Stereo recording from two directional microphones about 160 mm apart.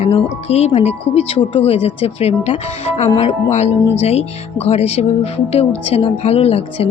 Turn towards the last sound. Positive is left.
turn(degrees=35)  # may be behind; listen again after turning